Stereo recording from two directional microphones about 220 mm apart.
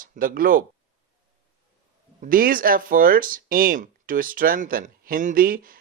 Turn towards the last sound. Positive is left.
turn(degrees=-40)  # may be behind; listen again after turning